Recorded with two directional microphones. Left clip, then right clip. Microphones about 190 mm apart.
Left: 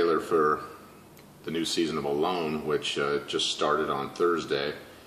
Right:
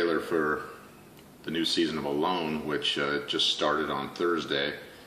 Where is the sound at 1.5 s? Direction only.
10° right (ahead or behind).